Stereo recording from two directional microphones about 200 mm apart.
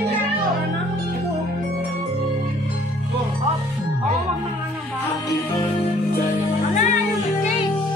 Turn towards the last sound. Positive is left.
turn(degrees=35)  # may be behind; listen again after turning